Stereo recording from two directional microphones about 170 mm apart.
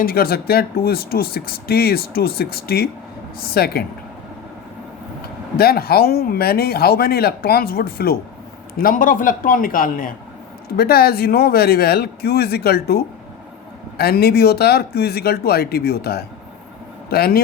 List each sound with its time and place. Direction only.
0.0 s speech: 60° left (ahead or behind)
5.5 s a man's voice: 65° left (ahead or behind)